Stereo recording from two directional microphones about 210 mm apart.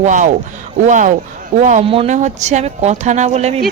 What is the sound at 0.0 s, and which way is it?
Speech, 35° right (ahead or behind).